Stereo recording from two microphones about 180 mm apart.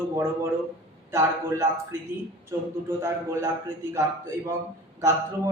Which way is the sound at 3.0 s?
15° right (ahead or behind).